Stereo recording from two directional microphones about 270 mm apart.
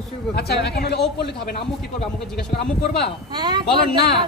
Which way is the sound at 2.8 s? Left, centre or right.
Left.